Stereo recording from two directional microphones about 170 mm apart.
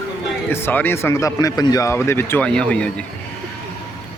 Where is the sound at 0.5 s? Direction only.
10° left (ahead or behind).